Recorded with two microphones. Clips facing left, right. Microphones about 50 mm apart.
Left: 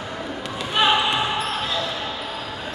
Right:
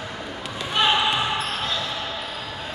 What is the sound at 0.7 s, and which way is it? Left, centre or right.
Basketball bounce, centre.